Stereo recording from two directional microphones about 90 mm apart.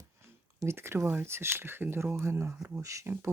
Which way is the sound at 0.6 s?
30° right (ahead or behind).